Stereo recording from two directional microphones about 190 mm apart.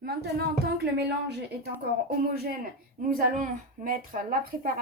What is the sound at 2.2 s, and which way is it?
Speech, 55° right (ahead or behind).